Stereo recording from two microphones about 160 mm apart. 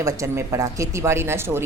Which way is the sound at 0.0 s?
20° right (ahead or behind).